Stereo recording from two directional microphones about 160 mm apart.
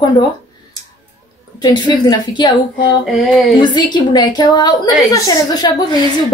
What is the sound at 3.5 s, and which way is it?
A woman's voice, 30° left (ahead or behind).